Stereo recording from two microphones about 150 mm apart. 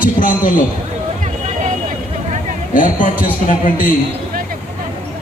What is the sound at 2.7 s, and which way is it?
A man's voice, 65° left (ahead or behind).